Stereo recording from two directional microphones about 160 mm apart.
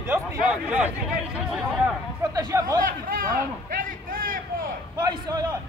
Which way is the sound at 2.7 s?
60° right (ahead or behind).